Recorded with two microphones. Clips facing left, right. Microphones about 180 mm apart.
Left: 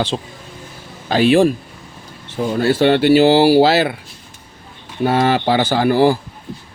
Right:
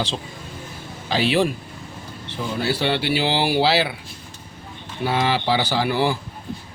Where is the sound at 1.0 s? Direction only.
50° left (ahead or behind).